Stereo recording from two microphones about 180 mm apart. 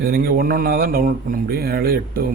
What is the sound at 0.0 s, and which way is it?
Speech, 60° right (ahead or behind).